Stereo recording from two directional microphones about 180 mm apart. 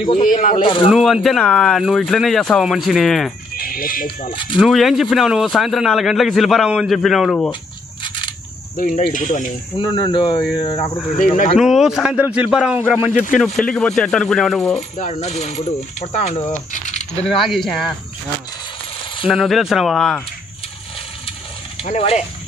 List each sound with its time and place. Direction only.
0.2 s speech: 50° left (ahead or behind)
0.8 s a man's voice: 5° right (ahead or behind)
3.5 s speech: 55° left (ahead or behind)
4.3 s speech: 30° left (ahead or behind)
4.6 s a man's voice: centre (ahead or behind)
8.7 s speech: 50° left (ahead or behind)
9.8 s speech: 25° left (ahead or behind)
11.1 s speech: 45° left (ahead or behind)
11.5 s a man's voice: centre (ahead or behind)
13.4 s a man's voice: 5° left (ahead or behind)
14.8 s speech: 40° left (ahead or behind)
17.1 s a man's voice: centre (ahead or behind)
19.2 s a man's voice: centre (ahead or behind)
21.8 s speech: 35° left (ahead or behind)